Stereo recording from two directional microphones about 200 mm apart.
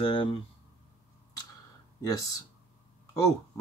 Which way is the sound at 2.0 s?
15° left (ahead or behind).